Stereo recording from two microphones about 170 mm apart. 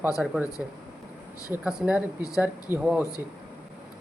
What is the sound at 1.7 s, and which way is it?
Speech, 5° right (ahead or behind).